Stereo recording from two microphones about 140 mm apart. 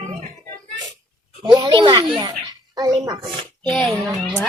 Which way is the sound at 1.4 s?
30° right (ahead or behind).